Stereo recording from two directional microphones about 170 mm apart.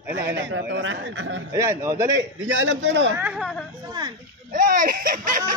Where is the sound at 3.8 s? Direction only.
25° right (ahead or behind).